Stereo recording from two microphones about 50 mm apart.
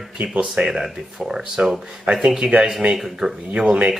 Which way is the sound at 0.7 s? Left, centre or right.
Centre.